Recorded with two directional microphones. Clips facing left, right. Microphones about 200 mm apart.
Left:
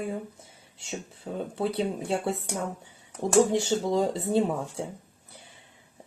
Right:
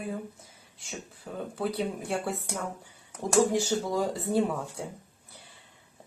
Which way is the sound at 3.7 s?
25° left (ahead or behind).